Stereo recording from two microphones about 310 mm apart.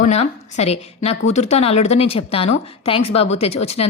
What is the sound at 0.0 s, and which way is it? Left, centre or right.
A woman's voice, left.